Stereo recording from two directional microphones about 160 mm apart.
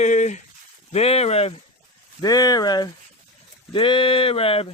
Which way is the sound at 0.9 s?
40° left (ahead or behind).